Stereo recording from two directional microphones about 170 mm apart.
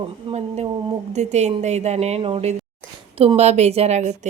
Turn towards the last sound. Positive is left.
turn(degrees=-40)  # may be behind; listen again after turning